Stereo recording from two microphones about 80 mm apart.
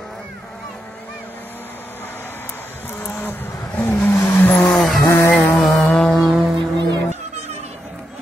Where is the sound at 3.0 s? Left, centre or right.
Left.